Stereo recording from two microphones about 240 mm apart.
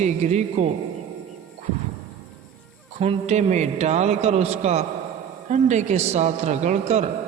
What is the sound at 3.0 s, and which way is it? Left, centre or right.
A man's voice, right.